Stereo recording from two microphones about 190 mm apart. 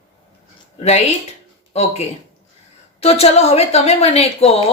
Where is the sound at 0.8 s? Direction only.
35° left (ahead or behind).